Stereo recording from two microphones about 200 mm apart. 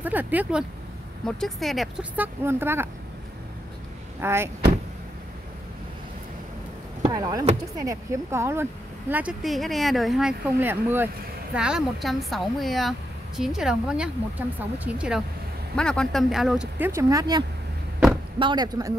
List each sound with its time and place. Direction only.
0.0 s speech: 10° right (ahead or behind)
4.2 s speech: 10° right (ahead or behind)
7.0 s speech: 20° right (ahead or behind)